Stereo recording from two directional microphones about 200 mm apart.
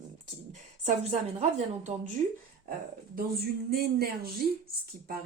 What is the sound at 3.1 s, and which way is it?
Speech, 50° right (ahead or behind).